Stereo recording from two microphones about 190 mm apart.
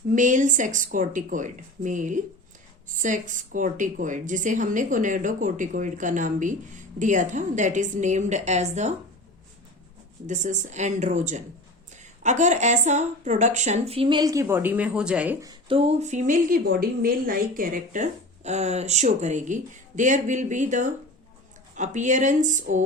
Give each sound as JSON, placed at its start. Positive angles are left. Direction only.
{"t": 0.1, "sound": "a woman's voice", "side_deg": -40}
{"t": 10.2, "sound": "a woman's voice", "side_deg": -40}
{"t": 15.4, "sound": "a woman's voice", "side_deg": -30}